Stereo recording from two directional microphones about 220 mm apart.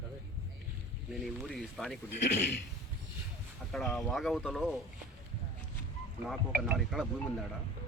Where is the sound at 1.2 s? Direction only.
Centre (ahead or behind).